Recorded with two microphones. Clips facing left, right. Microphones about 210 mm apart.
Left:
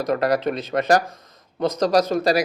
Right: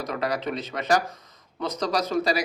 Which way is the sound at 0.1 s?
50° left (ahead or behind).